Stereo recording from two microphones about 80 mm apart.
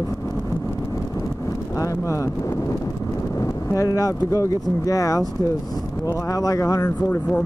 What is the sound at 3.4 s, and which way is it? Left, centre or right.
Speech, left.